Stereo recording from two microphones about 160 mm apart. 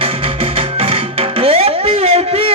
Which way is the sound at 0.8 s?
35° right (ahead or behind).